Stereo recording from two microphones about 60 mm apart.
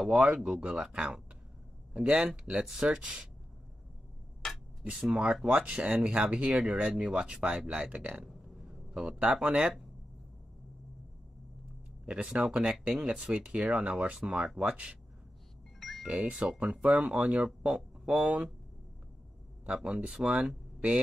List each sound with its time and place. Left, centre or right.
0.0 s speech: centre
5.1 s speech: centre
8.3 s a sound: centre
12.1 s speech: centre
15.8 s music: centre
16.1 s speech: centre
19.6 s speech: centre